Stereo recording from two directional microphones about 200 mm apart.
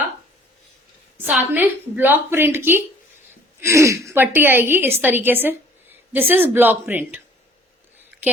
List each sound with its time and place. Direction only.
1.3 s a woman's voice: 10° right (ahead or behind)
8.2 s a woman's voice: 10° right (ahead or behind)